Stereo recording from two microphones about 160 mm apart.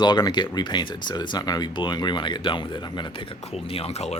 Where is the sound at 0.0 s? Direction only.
25° left (ahead or behind).